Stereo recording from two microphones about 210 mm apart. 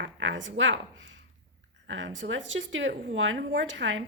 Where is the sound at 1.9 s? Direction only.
60° right (ahead or behind).